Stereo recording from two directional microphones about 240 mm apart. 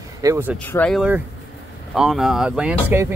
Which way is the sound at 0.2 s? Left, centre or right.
Centre.